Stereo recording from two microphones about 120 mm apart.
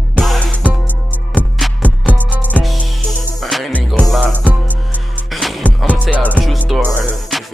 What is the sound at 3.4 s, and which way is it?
Music, centre (ahead or behind).